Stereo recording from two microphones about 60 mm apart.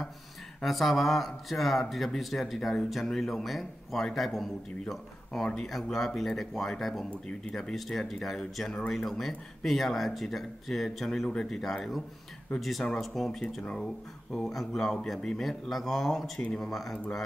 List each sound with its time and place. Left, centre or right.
0.6 s speech: centre
7.2 s speech: centre
8.1 s speech: centre
13.6 s speech: centre
14.3 s speech: centre
16.3 s speech: centre